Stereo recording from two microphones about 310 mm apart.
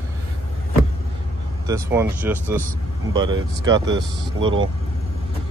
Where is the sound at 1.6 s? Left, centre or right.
Centre.